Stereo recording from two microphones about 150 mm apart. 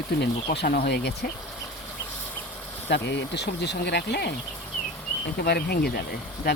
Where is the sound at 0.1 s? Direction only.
90° left.